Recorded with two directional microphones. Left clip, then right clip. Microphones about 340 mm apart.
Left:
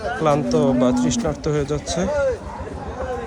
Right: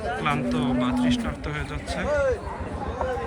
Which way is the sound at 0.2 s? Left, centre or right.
Centre.